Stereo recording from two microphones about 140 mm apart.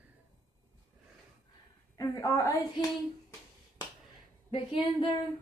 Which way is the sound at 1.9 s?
25° left (ahead or behind).